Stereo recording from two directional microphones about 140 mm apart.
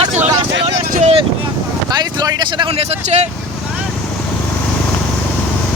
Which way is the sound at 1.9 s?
30° right (ahead or behind).